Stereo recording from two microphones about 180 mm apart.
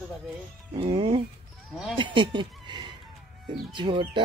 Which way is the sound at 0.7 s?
30° right (ahead or behind).